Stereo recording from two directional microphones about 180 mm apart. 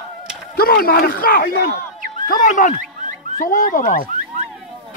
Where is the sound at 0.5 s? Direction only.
55° left (ahead or behind).